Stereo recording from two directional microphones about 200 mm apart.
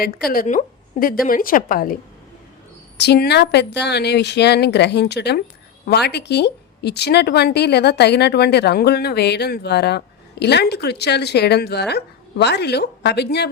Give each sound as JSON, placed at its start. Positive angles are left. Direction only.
{"t": 0.3, "sound": "a woman's voice", "side_deg": 45}
{"t": 3.0, "sound": "a woman's voice", "side_deg": 55}